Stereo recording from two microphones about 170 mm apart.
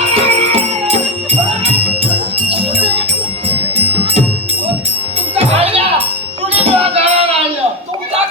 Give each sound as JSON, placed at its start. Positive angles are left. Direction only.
{"t": 0.1, "sound": "music", "side_deg": -35}
{"t": 2.5, "sound": "jingle bell", "side_deg": -35}
{"t": 3.8, "sound": "music", "side_deg": -35}
{"t": 5.3, "sound": "music", "side_deg": -35}